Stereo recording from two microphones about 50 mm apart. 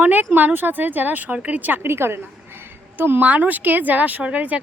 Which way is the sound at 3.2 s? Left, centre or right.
Right.